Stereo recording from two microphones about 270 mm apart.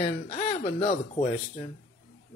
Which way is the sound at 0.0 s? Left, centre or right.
Left.